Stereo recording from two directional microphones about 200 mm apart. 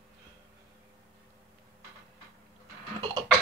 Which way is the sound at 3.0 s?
25° right (ahead or behind).